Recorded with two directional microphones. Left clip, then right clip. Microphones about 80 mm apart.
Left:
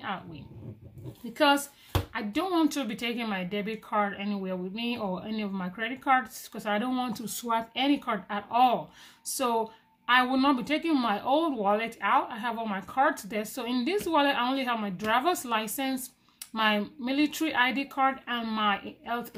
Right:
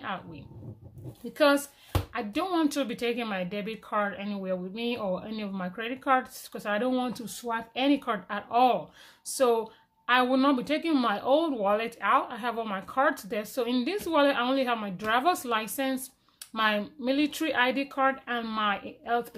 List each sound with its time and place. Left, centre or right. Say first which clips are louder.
0.0 s a woman's voice: even; right
1.4 s speech: right 1 dB; right
7.2 s speech: left 3 dB; centre
7.7 s speech: right 1 dB; right